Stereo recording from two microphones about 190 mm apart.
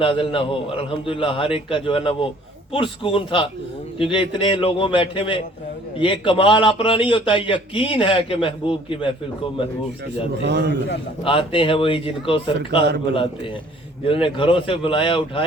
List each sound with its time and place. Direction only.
0.0 s a man's voice: 30° left (ahead or behind)
10.4 s a man's voice: 65° right (ahead or behind)
11.2 s a man's voice: 30° left (ahead or behind)